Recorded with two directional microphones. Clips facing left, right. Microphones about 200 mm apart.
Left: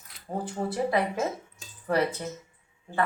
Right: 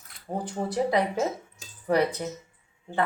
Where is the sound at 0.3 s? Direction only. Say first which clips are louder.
Even; 15° right (ahead or behind).